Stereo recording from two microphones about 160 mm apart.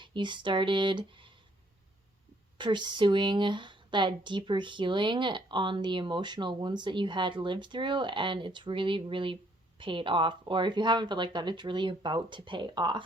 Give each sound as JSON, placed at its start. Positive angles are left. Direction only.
{"t": 0.0, "sound": "speech", "side_deg": -30}
{"t": 2.6, "sound": "speech", "side_deg": -30}